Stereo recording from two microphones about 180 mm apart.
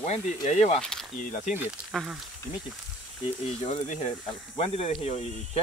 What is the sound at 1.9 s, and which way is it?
Speech, centre (ahead or behind).